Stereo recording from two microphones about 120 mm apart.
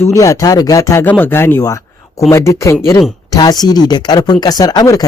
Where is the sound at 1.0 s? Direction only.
15° left (ahead or behind).